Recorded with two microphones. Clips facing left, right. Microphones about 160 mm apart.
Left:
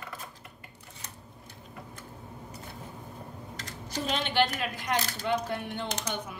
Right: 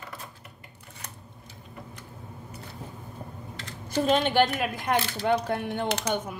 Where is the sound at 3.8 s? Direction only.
45° right (ahead or behind); by 6.2 s 65° right (ahead or behind).